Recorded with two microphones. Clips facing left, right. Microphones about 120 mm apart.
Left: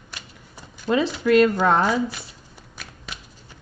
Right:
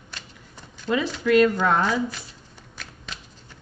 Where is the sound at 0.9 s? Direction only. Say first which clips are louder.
Left 3 dB; 20° left (ahead or behind).